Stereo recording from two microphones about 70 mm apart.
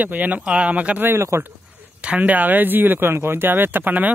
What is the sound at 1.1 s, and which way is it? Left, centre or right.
Speech, right.